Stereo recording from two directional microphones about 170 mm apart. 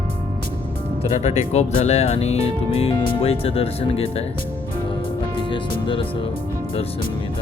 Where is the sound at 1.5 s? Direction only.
40° left (ahead or behind).